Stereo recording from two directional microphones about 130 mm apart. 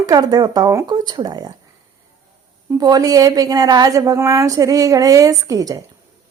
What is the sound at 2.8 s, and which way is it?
Speech, 30° right (ahead or behind).